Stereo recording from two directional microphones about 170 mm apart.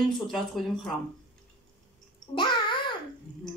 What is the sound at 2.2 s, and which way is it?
Babbling, 25° left (ahead or behind).